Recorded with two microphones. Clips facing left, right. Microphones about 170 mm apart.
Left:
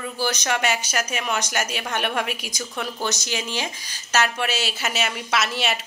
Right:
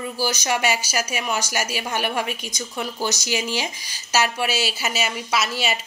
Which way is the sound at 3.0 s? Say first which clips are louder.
Right 4 dB; 10° right (ahead or behind).